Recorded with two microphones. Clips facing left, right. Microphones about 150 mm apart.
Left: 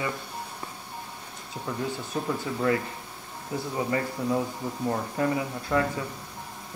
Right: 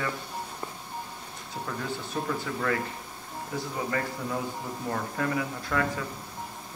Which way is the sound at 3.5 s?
20° left (ahead or behind).